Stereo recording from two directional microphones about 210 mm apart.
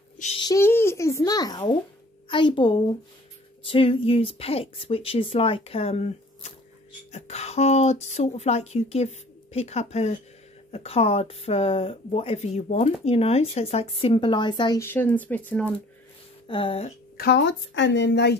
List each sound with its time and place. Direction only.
0.2 s a child's voice: 30° left (ahead or behind)
0.5 s a child's voice: 10° left (ahead or behind)
16.4 s speech: 25° left (ahead or behind)
17.2 s speech: 55° left (ahead or behind)